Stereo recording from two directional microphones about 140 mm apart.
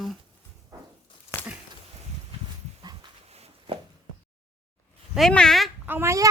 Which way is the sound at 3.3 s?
45° right (ahead or behind).